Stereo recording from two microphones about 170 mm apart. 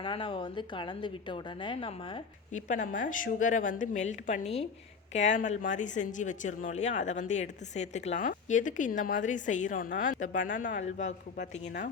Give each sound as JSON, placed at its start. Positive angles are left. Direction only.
{"t": 0.0, "sound": "a woman's voice", "side_deg": 30}
{"t": 2.5, "sound": "speech", "side_deg": 45}